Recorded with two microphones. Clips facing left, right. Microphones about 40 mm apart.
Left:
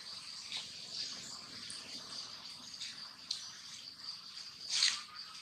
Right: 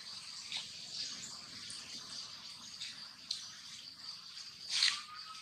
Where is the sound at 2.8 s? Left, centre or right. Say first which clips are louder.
Even; centre.